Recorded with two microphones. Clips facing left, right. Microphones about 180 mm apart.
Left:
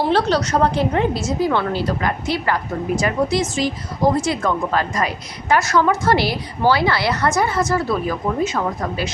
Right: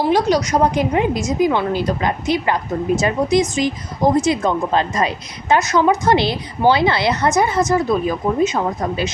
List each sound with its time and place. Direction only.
0.1 s a woman's voice: 10° right (ahead or behind)